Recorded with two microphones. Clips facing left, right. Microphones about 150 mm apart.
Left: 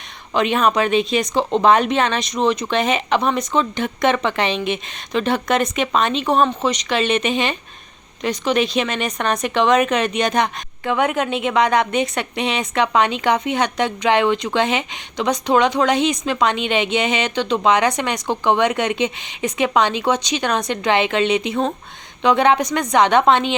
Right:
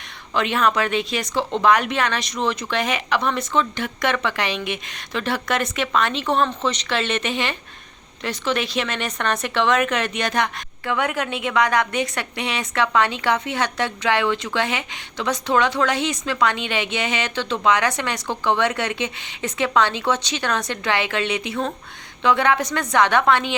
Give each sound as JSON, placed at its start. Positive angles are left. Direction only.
{"t": 0.3, "sound": "speech", "side_deg": 20}